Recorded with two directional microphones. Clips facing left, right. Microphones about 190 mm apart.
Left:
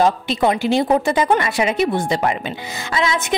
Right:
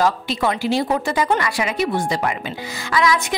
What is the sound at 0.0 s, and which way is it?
A woman's voice, 20° left (ahead or behind).